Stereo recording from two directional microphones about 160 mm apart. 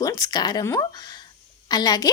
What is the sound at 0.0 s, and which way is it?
A woman's voice, 20° left (ahead or behind).